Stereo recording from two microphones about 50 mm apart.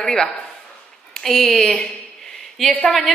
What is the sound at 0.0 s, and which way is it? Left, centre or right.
A man's voice, centre.